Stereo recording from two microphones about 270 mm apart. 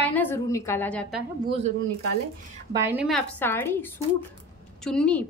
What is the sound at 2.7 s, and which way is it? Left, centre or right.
A woman's voice, centre.